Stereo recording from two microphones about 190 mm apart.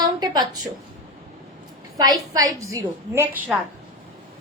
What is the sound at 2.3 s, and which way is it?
A woman's voice, 20° right (ahead or behind).